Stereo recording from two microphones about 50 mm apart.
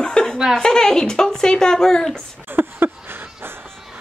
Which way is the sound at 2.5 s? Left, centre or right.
Right.